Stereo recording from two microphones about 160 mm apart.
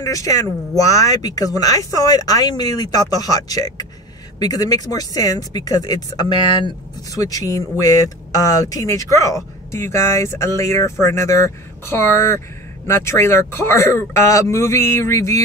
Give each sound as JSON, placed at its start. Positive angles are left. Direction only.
{"t": 0.0, "sound": "speech", "side_deg": 20}